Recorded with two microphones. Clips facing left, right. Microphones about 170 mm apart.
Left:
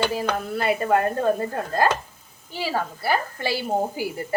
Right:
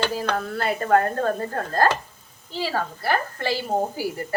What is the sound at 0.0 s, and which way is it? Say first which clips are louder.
A woman's voice: left 1 dB; 10° left (ahead or behind).